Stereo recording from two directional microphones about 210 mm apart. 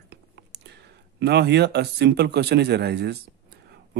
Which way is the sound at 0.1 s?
55° right (ahead or behind).